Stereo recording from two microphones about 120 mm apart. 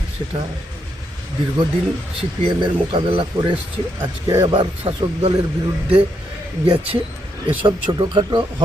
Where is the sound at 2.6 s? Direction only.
45° right (ahead or behind).